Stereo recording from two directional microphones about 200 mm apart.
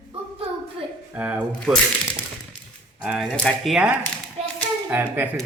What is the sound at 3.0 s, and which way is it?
Speech, 5° right (ahead or behind).